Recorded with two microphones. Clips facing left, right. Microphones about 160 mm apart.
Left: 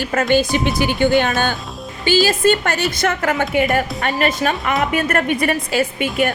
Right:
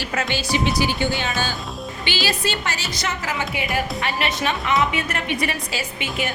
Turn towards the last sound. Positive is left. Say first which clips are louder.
# left 9 dB
turn(degrees=55)  # may be behind; listen again after turning